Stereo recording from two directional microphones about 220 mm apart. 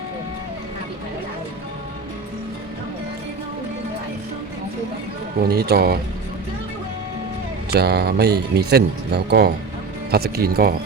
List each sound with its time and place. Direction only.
5.4 s speech: 45° right (ahead or behind)
7.7 s speech: 45° right (ahead or behind)